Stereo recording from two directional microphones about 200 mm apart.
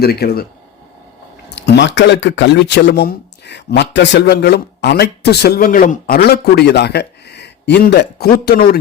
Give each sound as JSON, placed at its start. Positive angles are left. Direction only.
{"t": 0.0, "sound": "speech", "side_deg": 50}
{"t": 1.5, "sound": "speech", "side_deg": 55}